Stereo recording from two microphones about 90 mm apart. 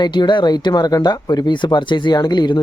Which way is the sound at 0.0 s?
55° left (ahead or behind).